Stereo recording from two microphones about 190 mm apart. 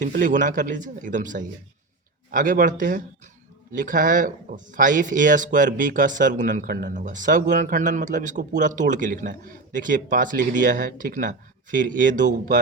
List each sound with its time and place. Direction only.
0.0 s speech: 40° right (ahead or behind)